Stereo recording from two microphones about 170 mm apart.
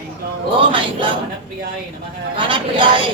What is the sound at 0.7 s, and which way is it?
Speech, 30° right (ahead or behind).